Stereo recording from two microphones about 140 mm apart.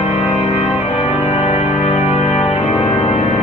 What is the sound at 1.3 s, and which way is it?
Music, 50° left (ahead or behind).